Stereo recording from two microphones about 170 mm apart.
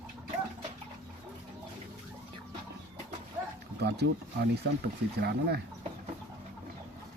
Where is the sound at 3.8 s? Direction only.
70° right (ahead or behind).